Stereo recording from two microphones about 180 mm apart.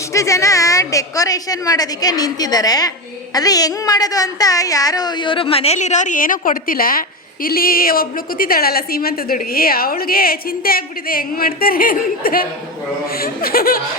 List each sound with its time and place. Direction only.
0.1 s a woman's voice: 15° left (ahead or behind); by 13.8 s 55° left (ahead or behind)